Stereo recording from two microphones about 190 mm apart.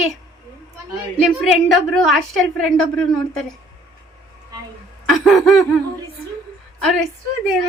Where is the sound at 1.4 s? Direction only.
Centre (ahead or behind).